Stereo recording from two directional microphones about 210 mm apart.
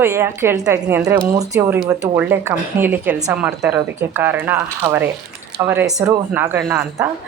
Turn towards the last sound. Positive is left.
turn(degrees=-5)  # may be behind; listen again after turning